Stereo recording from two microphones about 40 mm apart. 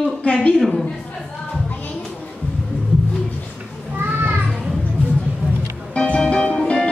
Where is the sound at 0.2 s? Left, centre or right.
Left.